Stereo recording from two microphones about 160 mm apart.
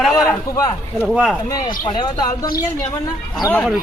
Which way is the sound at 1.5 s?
25° left (ahead or behind).